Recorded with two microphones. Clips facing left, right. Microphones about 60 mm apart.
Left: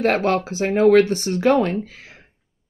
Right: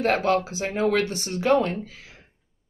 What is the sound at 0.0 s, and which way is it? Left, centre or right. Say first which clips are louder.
A woman's voice: left 3 dB; left.